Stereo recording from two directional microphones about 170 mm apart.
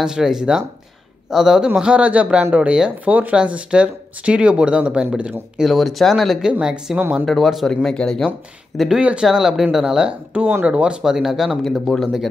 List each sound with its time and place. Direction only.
0.0 s a man's voice: 5° right (ahead or behind)